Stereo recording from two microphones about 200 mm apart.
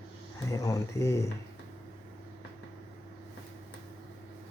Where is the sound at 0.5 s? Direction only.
15° left (ahead or behind).